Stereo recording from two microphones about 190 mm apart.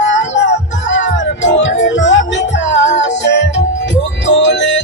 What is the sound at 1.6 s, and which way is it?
Music, 75° left (ahead or behind).